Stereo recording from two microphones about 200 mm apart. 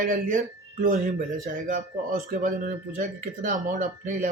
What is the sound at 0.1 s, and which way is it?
Speech, 40° right (ahead or behind).